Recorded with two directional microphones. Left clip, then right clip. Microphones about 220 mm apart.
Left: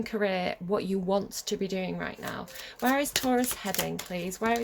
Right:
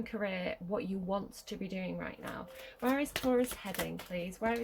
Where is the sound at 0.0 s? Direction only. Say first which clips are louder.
Left 8 dB; 50° left (ahead or behind).